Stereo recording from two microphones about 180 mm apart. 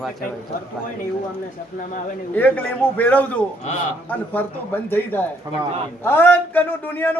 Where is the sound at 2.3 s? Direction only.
10° left (ahead or behind).